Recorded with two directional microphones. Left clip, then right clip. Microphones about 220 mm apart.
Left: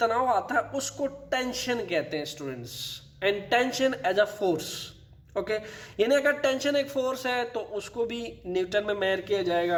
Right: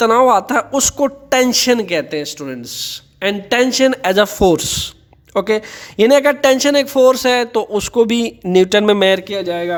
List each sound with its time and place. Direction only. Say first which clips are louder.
0.0 s speech: right 13 dB; 55° right (ahead or behind)